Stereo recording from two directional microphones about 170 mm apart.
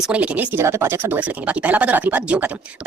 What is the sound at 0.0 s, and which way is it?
Speech, 5° right (ahead or behind).